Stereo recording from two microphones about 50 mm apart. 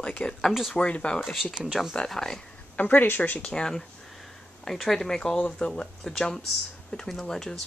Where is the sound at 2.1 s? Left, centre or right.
Centre.